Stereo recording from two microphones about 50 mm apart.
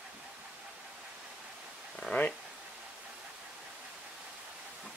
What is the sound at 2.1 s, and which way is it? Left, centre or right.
Speech, left.